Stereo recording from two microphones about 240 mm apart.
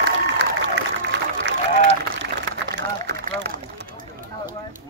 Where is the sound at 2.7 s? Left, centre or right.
Right.